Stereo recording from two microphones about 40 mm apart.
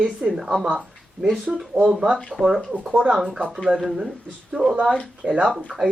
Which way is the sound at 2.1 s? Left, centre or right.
Centre.